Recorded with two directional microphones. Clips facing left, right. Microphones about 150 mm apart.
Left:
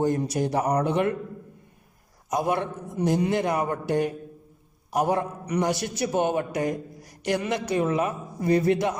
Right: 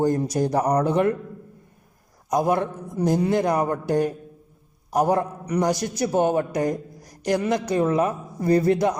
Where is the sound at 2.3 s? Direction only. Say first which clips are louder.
Right 4 dB; 40° right (ahead or behind).